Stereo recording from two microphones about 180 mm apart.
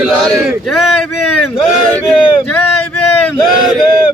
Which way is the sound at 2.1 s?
5° left (ahead or behind).